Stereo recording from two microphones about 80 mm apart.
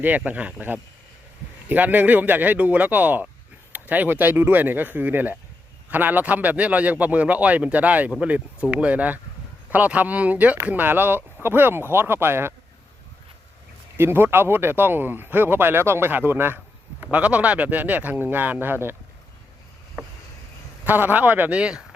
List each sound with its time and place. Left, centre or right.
0.3 s speech: centre
13.9 s speech: right
20.8 s speech: right